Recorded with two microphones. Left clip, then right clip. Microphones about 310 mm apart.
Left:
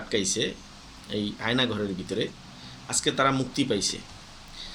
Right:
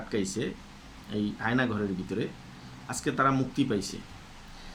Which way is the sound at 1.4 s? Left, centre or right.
Centre.